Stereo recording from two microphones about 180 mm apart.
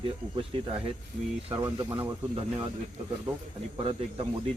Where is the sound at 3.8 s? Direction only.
30° right (ahead or behind).